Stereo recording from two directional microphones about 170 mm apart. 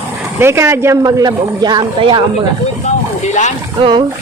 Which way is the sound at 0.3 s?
15° right (ahead or behind).